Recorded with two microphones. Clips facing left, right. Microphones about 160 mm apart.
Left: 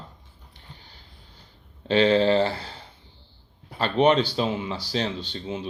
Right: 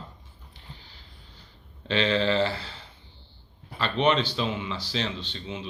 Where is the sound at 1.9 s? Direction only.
45° left (ahead or behind).